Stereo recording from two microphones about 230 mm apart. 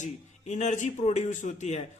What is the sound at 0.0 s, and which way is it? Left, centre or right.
Speech, left.